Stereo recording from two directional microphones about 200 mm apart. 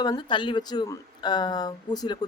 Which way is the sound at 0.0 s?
20° left (ahead or behind).